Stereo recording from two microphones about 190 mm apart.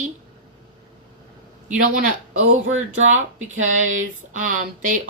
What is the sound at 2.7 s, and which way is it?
A woman's voice, 40° right (ahead or behind).